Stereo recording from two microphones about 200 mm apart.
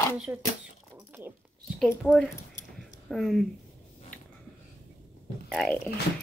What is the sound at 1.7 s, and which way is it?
Speech, 5° left (ahead or behind).